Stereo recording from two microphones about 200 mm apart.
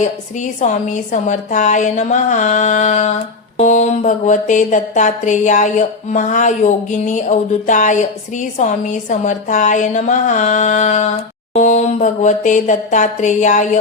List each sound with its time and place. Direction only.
0.3 s mantra: 35° left (ahead or behind)